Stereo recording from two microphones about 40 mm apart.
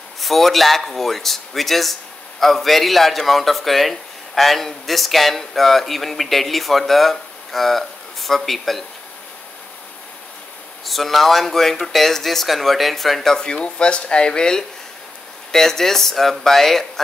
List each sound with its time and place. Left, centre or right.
0.2 s a man's voice: centre
10.9 s a man's voice: centre
13.3 s speech: centre
15.5 s speech: centre